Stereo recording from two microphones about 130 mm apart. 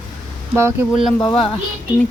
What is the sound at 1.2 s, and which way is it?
Speech, 40° left (ahead or behind).